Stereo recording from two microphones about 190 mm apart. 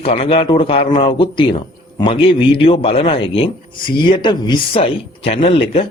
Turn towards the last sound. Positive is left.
turn(degrees=30)  # may be behind; listen again after turning